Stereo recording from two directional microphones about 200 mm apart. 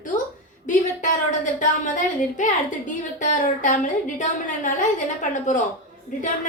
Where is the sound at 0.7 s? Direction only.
40° left (ahead or behind).